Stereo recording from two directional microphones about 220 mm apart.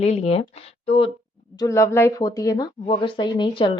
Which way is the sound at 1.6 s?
15° left (ahead or behind).